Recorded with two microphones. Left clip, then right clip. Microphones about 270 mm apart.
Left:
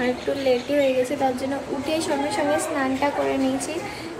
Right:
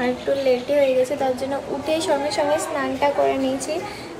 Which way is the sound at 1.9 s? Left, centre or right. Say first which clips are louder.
Right 3 dB; centre.